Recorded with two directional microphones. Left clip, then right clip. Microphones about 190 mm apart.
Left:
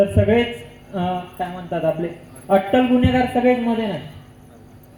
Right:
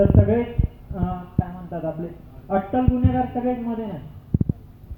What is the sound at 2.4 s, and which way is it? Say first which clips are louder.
A woman's voice: left 6 dB; 50° left (ahead or behind).